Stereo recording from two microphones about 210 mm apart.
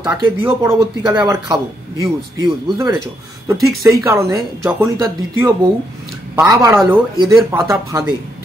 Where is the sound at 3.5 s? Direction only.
15° right (ahead or behind).